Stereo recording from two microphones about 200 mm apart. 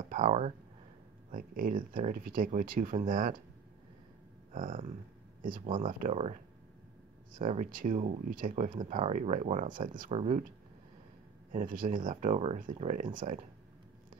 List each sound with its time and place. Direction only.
0.1 s speech: 35° right (ahead or behind)
4.5 s speech: 40° right (ahead or behind)
11.5 s speech: 40° right (ahead or behind)